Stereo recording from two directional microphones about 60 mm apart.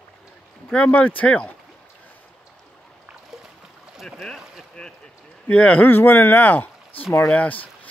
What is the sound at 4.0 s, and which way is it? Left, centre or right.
Boat, centre.